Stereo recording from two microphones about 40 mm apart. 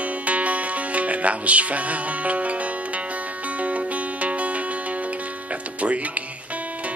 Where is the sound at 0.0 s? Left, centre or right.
Right.